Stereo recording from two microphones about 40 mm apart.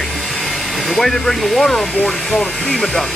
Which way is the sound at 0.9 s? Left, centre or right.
Centre.